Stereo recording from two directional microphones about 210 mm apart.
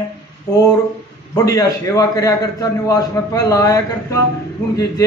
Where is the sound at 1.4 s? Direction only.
15° left (ahead or behind).